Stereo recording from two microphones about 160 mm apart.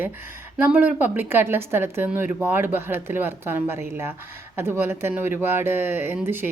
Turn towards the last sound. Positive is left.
turn(degrees=-10)  # may be behind; listen again after turning